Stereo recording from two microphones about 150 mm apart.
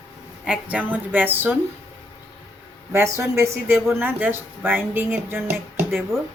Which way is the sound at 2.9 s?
20° right (ahead or behind).